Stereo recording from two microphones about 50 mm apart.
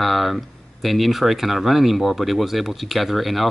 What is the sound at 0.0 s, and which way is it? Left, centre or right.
Speech, centre.